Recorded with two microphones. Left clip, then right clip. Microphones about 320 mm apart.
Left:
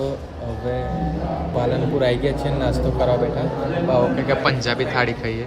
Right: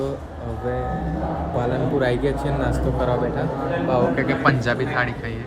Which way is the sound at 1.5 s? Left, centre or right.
Centre.